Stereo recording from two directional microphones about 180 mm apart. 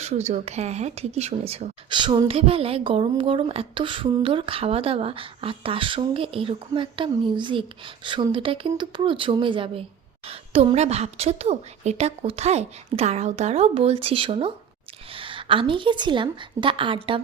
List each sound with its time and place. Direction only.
0.3 s a woman's voice: 35° right (ahead or behind)